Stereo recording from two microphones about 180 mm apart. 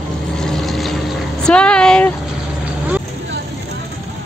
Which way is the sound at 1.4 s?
5° left (ahead or behind).